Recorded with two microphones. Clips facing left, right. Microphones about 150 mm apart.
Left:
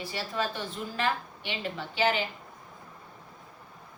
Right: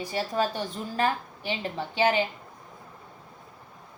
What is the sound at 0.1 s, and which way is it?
A woman's voice, 40° right (ahead or behind).